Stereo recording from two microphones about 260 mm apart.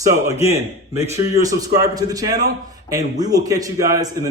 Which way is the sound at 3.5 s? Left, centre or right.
Centre.